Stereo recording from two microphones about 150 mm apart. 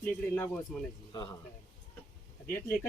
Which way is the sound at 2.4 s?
15° left (ahead or behind).